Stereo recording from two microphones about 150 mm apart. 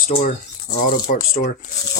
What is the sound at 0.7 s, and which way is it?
Speech, 75° left (ahead or behind).